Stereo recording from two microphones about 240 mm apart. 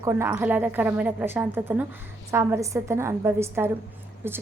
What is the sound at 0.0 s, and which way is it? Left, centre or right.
A woman's voice, centre.